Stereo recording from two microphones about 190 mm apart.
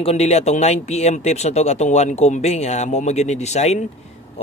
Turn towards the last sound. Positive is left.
turn(degrees=35)  # may be behind; listen again after turning